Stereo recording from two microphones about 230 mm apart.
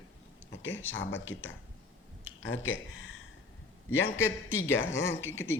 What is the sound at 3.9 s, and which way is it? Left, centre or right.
Speech, left.